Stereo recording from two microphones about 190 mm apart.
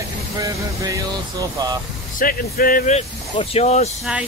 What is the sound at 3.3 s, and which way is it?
Speech, 30° left (ahead or behind).